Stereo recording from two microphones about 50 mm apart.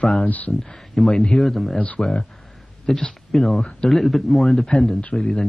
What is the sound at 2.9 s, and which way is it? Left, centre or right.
Speech, centre.